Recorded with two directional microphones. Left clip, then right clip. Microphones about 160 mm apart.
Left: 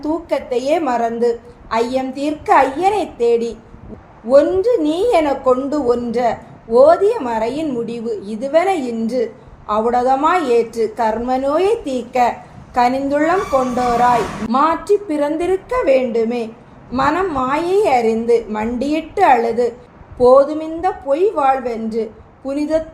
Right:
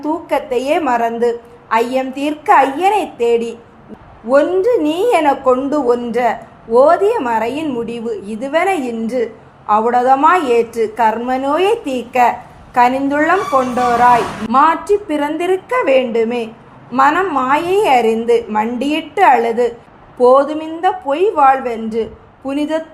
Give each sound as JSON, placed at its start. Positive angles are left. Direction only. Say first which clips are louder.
{"t": 0.3, "sound": "a woman's voice", "louder": "right 2 dB", "side_deg": -20}